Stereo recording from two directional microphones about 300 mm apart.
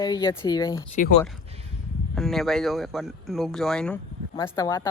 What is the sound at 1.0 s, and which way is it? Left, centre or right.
Speech, left.